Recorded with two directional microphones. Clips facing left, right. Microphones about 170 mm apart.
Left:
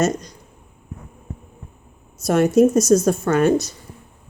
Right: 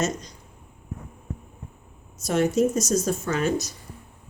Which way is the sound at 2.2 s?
60° left (ahead or behind).